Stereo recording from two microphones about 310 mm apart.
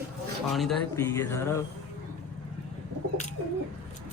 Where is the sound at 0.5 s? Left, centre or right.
Centre.